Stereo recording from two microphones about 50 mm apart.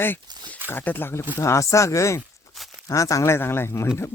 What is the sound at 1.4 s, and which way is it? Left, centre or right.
Speech, left.